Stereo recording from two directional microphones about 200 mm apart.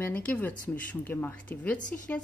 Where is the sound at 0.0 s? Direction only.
5° left (ahead or behind).